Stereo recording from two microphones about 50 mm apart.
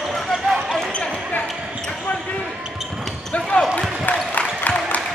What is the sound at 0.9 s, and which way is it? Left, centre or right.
Basketball bounce, left.